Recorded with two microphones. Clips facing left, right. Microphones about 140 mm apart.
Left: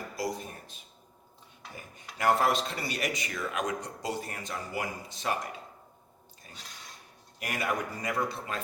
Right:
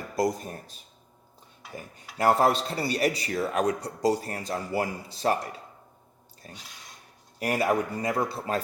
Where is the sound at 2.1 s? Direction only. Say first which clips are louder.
Right 4 dB; 35° right (ahead or behind).